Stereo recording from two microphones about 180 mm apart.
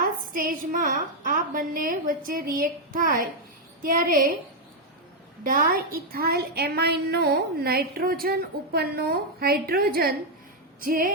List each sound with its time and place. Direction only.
0.3 s a woman's voice: 50° right (ahead or behind)
5.4 s a woman's voice: 50° right (ahead or behind)